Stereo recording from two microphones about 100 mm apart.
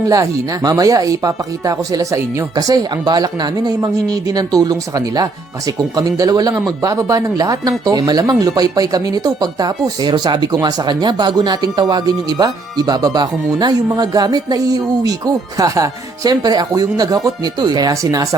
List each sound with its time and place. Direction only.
0.0 s speech: 35° right (ahead or behind)